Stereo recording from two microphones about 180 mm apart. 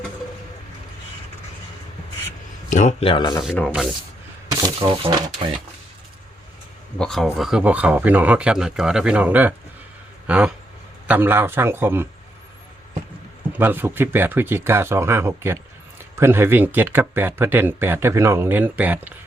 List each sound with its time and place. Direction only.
2.6 s speech: 40° left (ahead or behind)
3.7 s speech: centre (ahead or behind)
4.8 s speech: 25° right (ahead or behind)
7.0 s speech: centre (ahead or behind)
13.6 s speech: 10° right (ahead or behind)